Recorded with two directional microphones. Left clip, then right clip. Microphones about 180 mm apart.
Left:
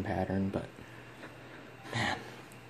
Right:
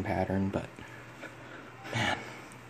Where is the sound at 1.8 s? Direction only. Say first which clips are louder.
Right 2 dB; 10° right (ahead or behind).